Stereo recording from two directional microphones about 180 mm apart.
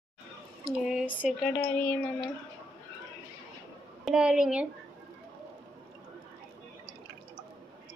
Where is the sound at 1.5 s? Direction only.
10° left (ahead or behind).